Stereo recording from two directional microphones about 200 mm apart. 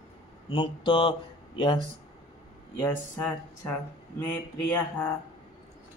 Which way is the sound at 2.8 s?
10° left (ahead or behind).